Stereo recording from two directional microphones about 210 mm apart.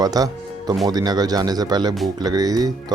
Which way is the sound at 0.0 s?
20° right (ahead or behind).